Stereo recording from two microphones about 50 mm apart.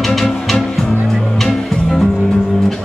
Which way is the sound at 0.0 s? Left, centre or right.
Centre.